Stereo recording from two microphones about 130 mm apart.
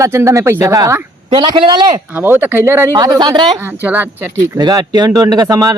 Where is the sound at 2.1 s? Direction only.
15° right (ahead or behind).